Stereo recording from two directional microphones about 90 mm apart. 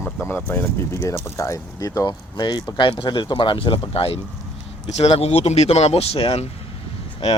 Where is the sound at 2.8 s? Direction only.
70° left (ahead or behind).